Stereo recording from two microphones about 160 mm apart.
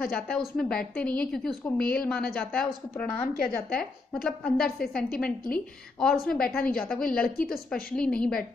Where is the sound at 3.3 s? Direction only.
65° left (ahead or behind).